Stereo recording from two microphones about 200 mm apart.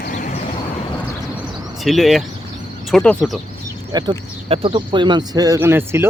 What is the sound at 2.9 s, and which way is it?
Speech, 5° left (ahead or behind).